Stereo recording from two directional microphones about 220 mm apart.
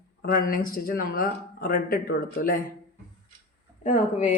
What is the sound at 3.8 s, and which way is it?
Speech, 35° left (ahead or behind).